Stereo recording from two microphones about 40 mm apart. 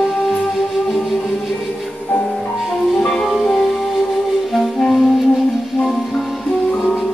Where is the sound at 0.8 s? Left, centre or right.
Centre.